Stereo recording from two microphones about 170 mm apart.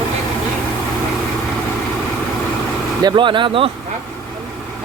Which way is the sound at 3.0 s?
25° right (ahead or behind).